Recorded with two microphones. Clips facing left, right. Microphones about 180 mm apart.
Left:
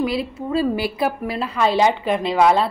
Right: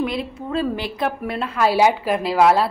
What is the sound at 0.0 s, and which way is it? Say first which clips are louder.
A woman's voice: left 2 dB; 5° left (ahead or behind).